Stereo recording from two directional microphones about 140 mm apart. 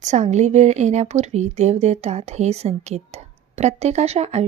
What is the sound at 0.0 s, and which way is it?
A woman's voice, 55° right (ahead or behind).